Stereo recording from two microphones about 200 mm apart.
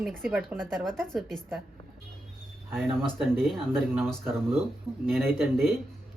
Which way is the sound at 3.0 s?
Centre (ahead or behind).